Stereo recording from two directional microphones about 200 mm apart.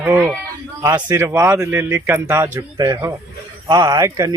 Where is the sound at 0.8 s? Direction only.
20° right (ahead or behind).